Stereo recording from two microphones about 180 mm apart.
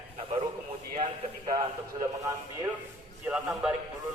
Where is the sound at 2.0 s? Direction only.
15° right (ahead or behind).